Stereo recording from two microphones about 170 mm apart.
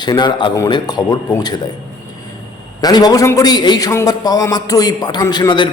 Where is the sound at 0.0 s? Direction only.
25° left (ahead or behind).